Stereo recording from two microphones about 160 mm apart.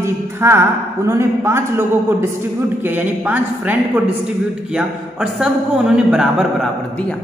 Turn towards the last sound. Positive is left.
turn(degrees=-5)  # may be behind; listen again after turning